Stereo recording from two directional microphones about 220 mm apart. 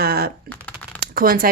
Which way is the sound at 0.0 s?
45° right (ahead or behind).